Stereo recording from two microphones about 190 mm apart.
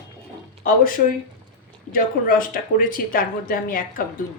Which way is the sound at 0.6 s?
45° left (ahead or behind).